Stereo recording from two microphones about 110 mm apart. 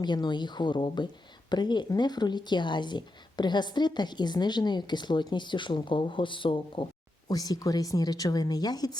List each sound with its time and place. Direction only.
0.0 s a woman's voice: 40° left (ahead or behind)
7.3 s a woman's voice: 35° left (ahead or behind)